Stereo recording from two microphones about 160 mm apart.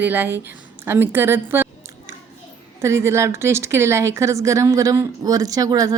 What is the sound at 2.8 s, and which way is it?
Speech, 15° right (ahead or behind).